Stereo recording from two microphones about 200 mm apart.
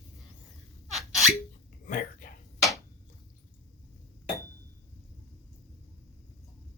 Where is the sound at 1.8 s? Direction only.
45° left (ahead or behind).